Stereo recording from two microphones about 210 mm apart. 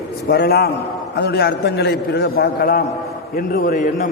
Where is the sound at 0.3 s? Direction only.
50° left (ahead or behind).